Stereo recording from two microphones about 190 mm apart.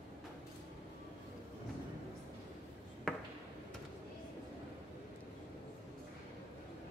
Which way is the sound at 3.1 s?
Centre (ahead or behind).